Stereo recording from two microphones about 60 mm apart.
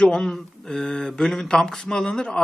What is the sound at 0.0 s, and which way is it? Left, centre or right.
Speech, centre.